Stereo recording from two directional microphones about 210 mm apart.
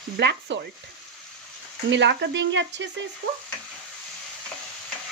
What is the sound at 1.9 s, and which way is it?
Speech, 55° right (ahead or behind).